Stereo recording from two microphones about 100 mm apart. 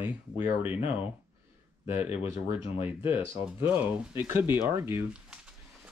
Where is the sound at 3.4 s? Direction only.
20° right (ahead or behind).